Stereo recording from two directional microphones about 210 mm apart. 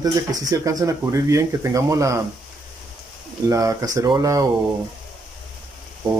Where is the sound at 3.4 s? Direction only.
15° right (ahead or behind).